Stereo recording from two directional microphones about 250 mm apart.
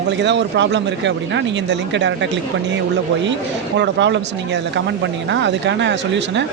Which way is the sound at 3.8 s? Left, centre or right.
Right.